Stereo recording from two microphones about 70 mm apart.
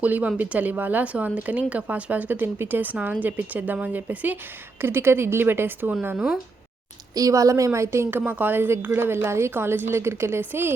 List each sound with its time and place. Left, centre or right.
0.0 s a woman's voice: right
4.8 s a woman's voice: right
6.1 s speech: centre
7.1 s a woman's voice: right
8.1 s a woman's voice: right